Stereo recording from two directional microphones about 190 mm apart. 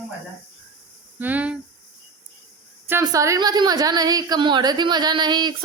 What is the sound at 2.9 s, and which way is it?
Speech, 15° right (ahead or behind).